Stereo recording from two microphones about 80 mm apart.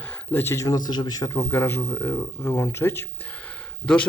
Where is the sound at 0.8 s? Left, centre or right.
Left.